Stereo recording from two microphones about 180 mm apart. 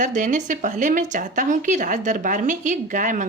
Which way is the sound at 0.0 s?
45° right (ahead or behind).